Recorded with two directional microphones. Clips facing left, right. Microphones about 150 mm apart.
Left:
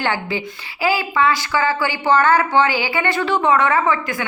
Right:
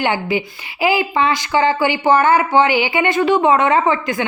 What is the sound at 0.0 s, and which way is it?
Speech, 15° right (ahead or behind).